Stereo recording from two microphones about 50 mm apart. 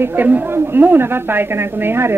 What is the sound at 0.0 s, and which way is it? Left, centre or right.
A woman's voice, right.